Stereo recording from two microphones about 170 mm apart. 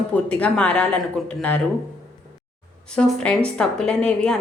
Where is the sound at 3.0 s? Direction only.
5° left (ahead or behind).